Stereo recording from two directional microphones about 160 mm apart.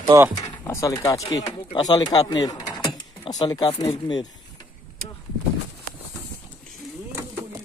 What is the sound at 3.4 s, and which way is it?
Speech, 25° left (ahead or behind).